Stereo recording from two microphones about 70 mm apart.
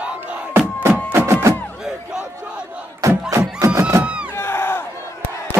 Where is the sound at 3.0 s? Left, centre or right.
Right.